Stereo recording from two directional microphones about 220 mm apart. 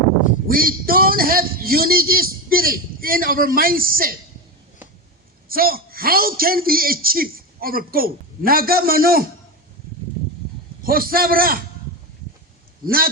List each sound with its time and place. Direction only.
0.4 s a man's voice: 40° right (ahead or behind)
5.5 s a man's voice: 40° right (ahead or behind)
10.8 s a man's voice: 40° right (ahead or behind)
12.8 s a man's voice: 40° right (ahead or behind)